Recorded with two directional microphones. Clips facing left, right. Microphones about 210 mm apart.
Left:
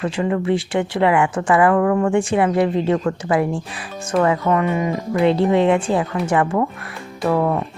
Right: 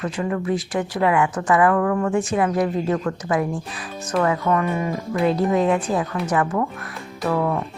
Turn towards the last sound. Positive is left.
turn(degrees=25)  # may be behind; listen again after turning